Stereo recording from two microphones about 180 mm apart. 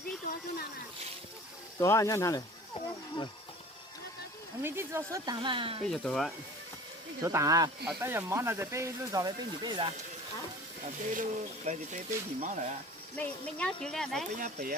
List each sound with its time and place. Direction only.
1.8 s speech: 15° left (ahead or behind)
4.6 s speech: 15° right (ahead or behind); by 5.8 s 30° right (ahead or behind)
5.9 s speech: centre (ahead or behind)
7.2 s speech: 20° right (ahead or behind)
11.1 s speech: 45° right (ahead or behind)
13.1 s speech: 10° left (ahead or behind)
14.3 s speech: 50° right (ahead or behind)